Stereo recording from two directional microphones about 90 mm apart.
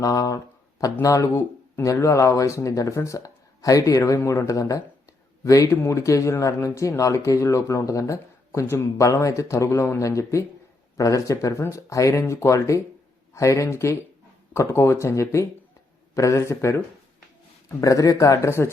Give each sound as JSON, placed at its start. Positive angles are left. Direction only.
{"t": 0.0, "sound": "speech", "side_deg": 40}